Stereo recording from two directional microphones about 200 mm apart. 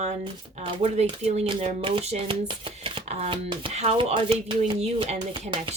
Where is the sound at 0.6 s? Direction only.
30° right (ahead or behind).